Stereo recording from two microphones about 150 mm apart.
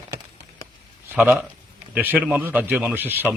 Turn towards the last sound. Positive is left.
turn(degrees=-15)  # may be behind; listen again after turning